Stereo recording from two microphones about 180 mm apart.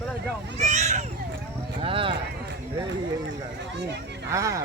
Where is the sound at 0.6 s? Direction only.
40° right (ahead or behind).